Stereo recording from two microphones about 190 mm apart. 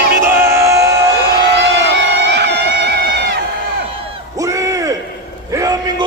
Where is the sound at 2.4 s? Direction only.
65° right (ahead or behind).